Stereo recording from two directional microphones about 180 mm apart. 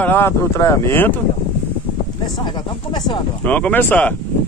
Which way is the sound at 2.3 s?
25° left (ahead or behind).